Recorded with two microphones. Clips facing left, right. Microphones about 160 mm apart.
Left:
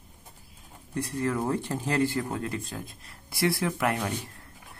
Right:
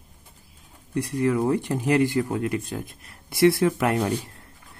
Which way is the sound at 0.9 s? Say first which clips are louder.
Right 6 dB; 15° right (ahead or behind).